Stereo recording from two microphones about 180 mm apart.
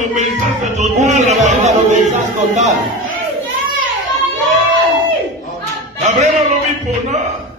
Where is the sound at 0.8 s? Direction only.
40° right (ahead or behind).